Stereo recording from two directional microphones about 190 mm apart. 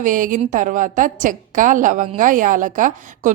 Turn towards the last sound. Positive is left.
turn(degrees=-40)  # may be behind; listen again after turning